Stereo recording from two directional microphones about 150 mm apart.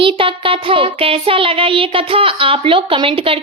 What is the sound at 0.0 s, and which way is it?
Music, 35° right (ahead or behind).